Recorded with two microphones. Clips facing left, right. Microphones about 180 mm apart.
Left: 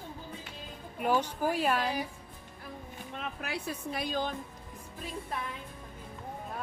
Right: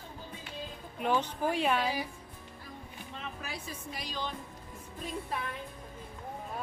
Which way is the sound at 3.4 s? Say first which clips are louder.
Left 5 dB; 65° left (ahead or behind).